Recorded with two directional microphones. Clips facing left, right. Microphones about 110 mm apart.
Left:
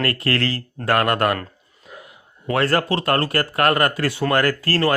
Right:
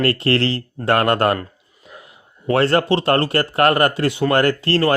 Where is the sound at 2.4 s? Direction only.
25° right (ahead or behind).